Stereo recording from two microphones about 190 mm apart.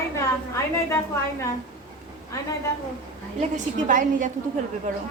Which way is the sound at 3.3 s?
40° right (ahead or behind).